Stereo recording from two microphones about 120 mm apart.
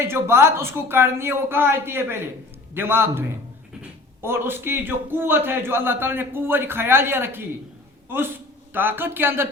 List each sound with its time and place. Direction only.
0.0 s a man's voice: 20° right (ahead or behind)